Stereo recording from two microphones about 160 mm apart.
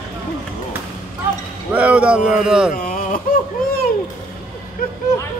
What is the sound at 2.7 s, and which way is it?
Whimper, 55° left (ahead or behind).